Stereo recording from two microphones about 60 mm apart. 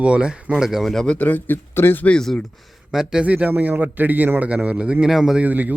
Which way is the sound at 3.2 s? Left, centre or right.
Right.